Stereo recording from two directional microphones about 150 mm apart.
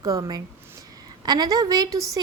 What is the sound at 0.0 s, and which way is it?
A woman's voice, 25° right (ahead or behind).